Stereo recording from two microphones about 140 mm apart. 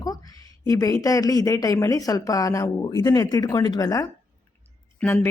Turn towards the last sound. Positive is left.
turn(degrees=15)  # may be behind; listen again after turning